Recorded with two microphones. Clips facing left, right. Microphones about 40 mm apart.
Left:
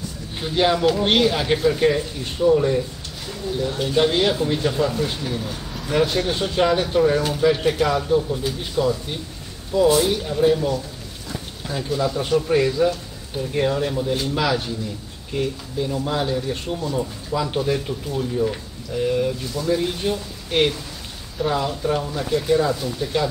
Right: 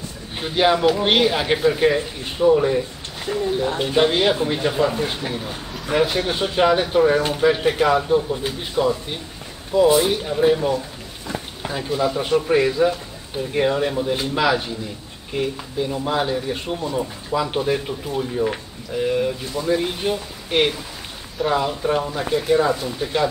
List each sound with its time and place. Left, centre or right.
0.4 s speech: centre